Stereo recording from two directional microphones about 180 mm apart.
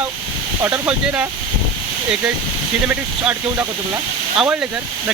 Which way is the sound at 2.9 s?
10° right (ahead or behind).